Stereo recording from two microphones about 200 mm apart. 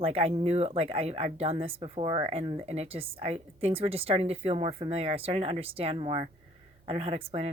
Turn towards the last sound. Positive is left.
turn(degrees=-30)  # may be behind; listen again after turning